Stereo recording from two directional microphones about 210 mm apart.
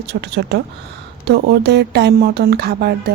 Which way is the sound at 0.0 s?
55° right (ahead or behind).